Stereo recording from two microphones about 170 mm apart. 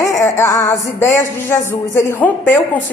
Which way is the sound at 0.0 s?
20° left (ahead or behind).